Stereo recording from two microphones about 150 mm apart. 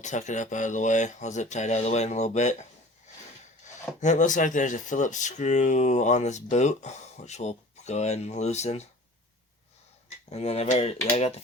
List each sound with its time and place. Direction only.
0.0 s speech: 55° left (ahead or behind)
4.0 s speech: 55° left (ahead or behind)
10.2 s speech: 45° left (ahead or behind)